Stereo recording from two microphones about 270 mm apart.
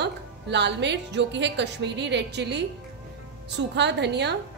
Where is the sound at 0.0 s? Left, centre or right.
Right.